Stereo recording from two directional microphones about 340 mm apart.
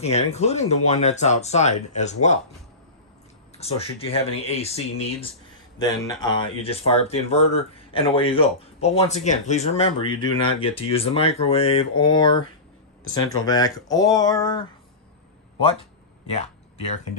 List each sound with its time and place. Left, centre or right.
0.0 s speech: centre
3.6 s speech: centre
16.2 s a sound: centre